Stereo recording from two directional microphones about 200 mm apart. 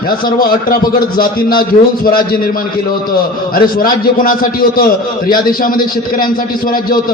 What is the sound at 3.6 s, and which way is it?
A man's voice, 45° left (ahead or behind).